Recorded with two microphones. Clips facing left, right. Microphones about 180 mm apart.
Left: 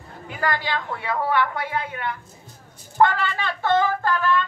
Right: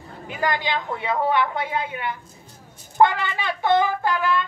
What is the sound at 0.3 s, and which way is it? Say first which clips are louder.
A woman's voice: right 1 dB; 20° right (ahead or behind).